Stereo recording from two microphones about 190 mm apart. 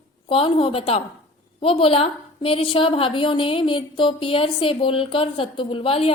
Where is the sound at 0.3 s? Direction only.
30° left (ahead or behind).